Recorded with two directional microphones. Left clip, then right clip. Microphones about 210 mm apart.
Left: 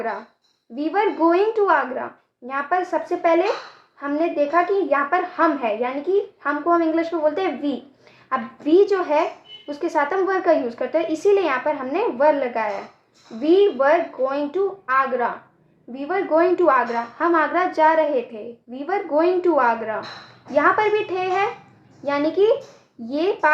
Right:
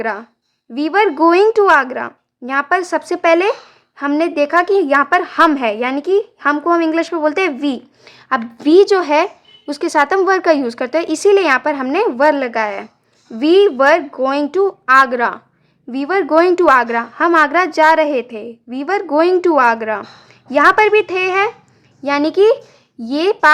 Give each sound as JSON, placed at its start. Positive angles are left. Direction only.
{"t": 0.8, "sound": "a woman's voice", "side_deg": -35}